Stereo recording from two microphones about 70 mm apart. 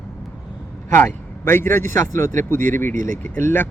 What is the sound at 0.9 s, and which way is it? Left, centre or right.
A man's voice, left.